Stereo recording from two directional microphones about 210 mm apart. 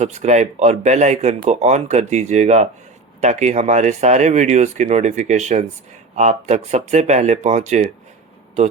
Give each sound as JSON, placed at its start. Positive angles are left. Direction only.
{"t": 0.0, "sound": "speech", "side_deg": -35}